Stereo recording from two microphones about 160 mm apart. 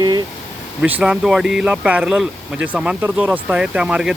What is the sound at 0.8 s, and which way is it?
Speech, 10° right (ahead or behind).